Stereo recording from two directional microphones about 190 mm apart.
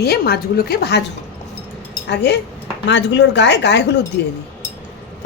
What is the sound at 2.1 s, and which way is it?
A woman's voice, 65° left (ahead or behind).